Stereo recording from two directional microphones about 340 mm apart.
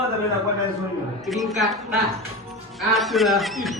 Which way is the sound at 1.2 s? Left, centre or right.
Centre.